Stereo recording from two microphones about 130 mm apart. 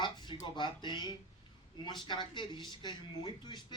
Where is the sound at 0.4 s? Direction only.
35° left (ahead or behind).